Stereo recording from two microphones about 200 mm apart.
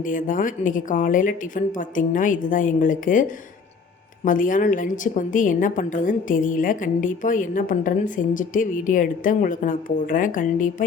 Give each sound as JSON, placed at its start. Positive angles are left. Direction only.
{"t": 0.0, "sound": "a woman's voice", "side_deg": 40}
{"t": 4.3, "sound": "a woman's voice", "side_deg": 40}